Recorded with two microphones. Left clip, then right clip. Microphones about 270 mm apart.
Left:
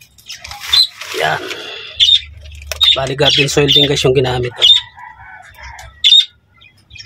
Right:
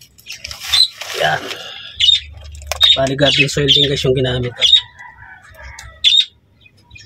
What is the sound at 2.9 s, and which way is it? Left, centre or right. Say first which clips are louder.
Speech: left 2 dB; left.